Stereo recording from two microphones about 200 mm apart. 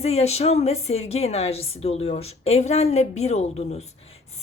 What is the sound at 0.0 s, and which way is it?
A woman's voice, 30° left (ahead or behind).